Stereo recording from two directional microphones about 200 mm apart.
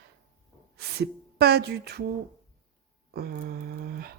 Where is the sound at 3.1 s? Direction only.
50° right (ahead or behind).